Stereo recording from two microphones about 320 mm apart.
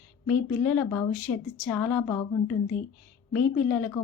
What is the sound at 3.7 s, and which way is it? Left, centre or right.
Speech, centre.